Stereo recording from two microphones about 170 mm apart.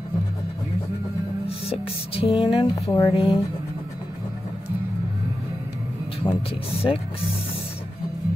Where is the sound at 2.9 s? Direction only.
15° left (ahead or behind).